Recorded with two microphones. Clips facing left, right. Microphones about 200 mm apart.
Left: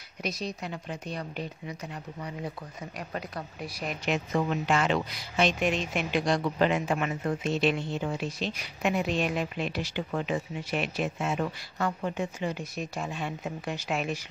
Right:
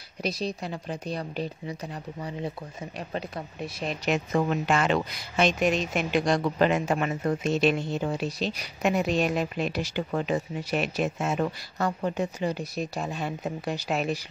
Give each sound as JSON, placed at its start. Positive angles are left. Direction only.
{"t": 0.2, "sound": "speech", "side_deg": -30}
{"t": 3.0, "sound": "speech", "side_deg": -25}
{"t": 4.0, "sound": "speech", "side_deg": -45}